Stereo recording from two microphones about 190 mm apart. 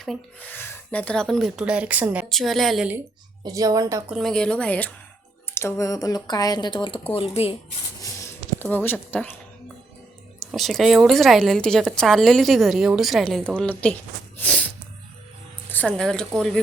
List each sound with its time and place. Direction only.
0.0 s a woman's voice: 5° left (ahead or behind)
3.4 s a woman's voice: 20° right (ahead or behind)
4.1 s a woman's voice: centre (ahead or behind); by 7.5 s 30° left (ahead or behind)
8.0 s speech: 15° left (ahead or behind)
10.4 s a woman's voice: centre (ahead or behind)
15.7 s a woman's voice: 5° left (ahead or behind)